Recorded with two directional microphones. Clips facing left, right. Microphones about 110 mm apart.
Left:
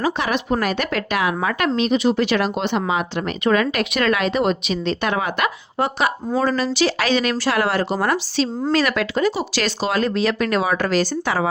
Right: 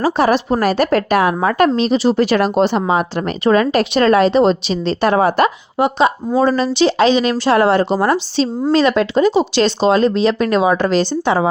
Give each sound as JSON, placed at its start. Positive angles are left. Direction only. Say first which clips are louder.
{"t": 0.0, "sound": "speech", "louder": "right 7 dB", "side_deg": -40}
{"t": 5.7, "sound": "speech", "louder": "right 6 dB", "side_deg": -20}